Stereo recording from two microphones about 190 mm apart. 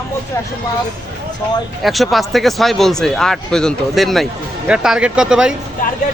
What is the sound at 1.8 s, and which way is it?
Speech, centre (ahead or behind).